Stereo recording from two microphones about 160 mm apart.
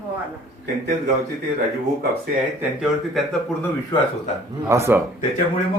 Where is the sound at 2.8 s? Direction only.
Centre (ahead or behind).